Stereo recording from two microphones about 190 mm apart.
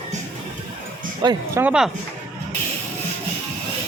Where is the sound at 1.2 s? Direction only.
20° right (ahead or behind).